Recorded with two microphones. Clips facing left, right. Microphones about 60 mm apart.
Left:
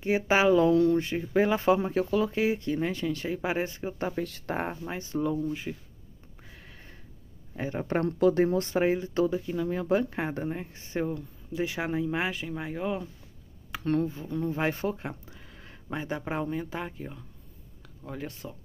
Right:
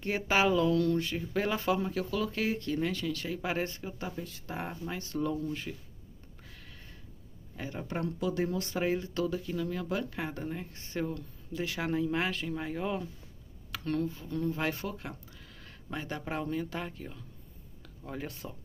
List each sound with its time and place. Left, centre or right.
0.0 s speech: centre
4.1 s speech: left
4.6 s speech: left
6.4 s a sound: left
7.5 s speech: left
7.9 s speech: left; by 13.1 s centre
13.7 s speech: left
18.0 s speech: centre